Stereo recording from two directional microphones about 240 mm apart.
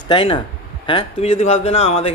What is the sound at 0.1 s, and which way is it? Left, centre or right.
A man's voice, left.